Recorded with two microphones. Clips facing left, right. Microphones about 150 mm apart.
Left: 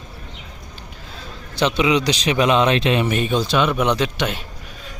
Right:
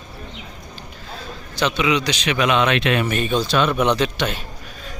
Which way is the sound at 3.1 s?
15° left (ahead or behind).